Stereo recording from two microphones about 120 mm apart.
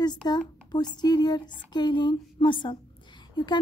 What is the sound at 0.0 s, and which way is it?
A woman's voice, 35° left (ahead or behind).